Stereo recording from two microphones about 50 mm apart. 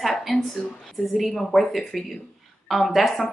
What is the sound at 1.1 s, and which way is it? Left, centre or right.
Speech, centre.